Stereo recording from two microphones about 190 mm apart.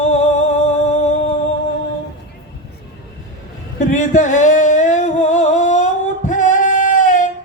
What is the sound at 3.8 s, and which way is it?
Singing, 40° left (ahead or behind).